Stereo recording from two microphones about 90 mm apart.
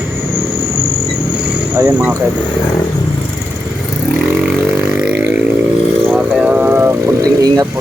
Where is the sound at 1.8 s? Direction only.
20° right (ahead or behind).